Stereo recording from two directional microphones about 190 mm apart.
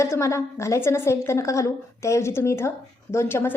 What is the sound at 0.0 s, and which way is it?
A woman's voice, 15° left (ahead or behind).